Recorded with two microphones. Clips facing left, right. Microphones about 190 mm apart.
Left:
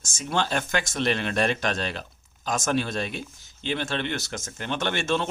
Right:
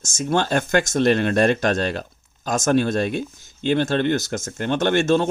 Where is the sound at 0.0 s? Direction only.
45° right (ahead or behind).